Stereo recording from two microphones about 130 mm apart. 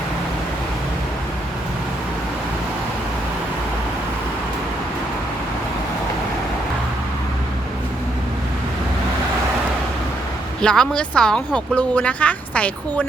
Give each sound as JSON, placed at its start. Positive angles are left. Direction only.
{"t": 10.6, "sound": "speech", "side_deg": 5}